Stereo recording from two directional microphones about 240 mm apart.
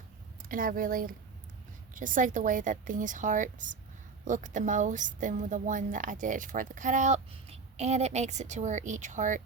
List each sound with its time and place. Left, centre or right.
0.4 s a woman's voice: right